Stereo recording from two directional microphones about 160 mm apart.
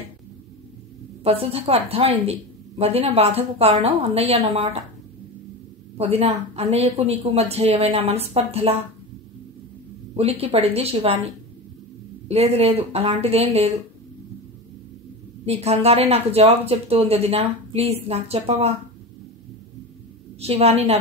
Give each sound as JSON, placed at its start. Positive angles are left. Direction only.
{"t": 1.2, "sound": "speech", "side_deg": -40}
{"t": 5.9, "sound": "speech", "side_deg": -40}
{"t": 10.4, "sound": "speech", "side_deg": -40}
{"t": 12.3, "sound": "speech", "side_deg": -40}
{"t": 15.4, "sound": "speech", "side_deg": -40}
{"t": 20.3, "sound": "speech", "side_deg": -40}